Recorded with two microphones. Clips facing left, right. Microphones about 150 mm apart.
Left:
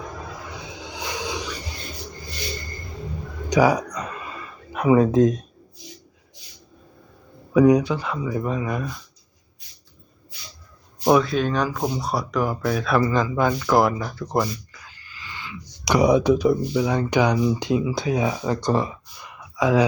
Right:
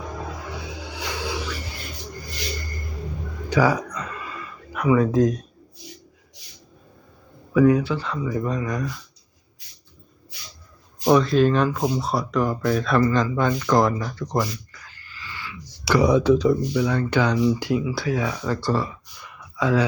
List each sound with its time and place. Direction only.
0.5 s music: 20° left (ahead or behind)
3.5 s speech: 15° left (ahead or behind)
3.9 s a sound: 20° left (ahead or behind)
7.5 s speech: 15° left (ahead or behind)
11.1 s speech: centre (ahead or behind)